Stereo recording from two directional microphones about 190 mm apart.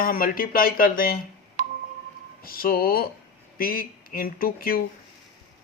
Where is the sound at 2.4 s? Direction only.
50° left (ahead or behind).